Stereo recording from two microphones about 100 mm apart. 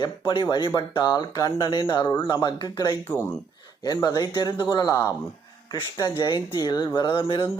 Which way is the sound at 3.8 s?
40° left (ahead or behind).